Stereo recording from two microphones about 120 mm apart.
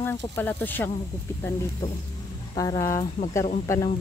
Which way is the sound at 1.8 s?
30° left (ahead or behind).